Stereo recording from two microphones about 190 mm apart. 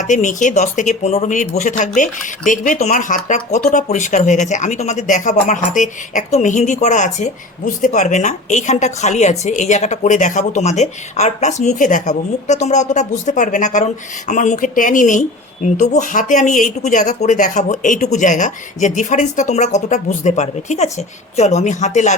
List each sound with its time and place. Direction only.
0.0 s speech: 40° left (ahead or behind)